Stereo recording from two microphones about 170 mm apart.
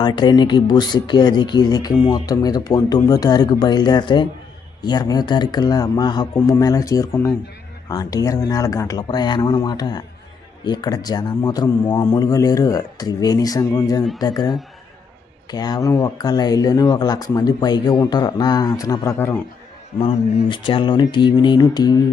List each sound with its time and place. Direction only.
0.0 s speech: 25° left (ahead or behind)
20.0 s speech: 30° left (ahead or behind)